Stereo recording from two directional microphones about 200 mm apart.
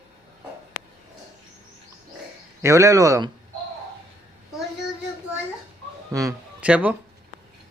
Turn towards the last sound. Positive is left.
turn(degrees=-5)  # may be behind; listen again after turning